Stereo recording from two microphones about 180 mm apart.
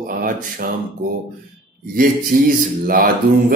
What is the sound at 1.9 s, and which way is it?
Speech, 50° right (ahead or behind).